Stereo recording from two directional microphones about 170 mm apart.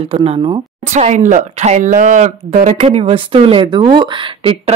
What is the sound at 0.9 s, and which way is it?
Speech, 45° right (ahead or behind).